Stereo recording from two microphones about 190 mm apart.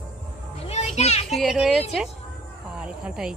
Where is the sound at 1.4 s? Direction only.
Centre (ahead or behind).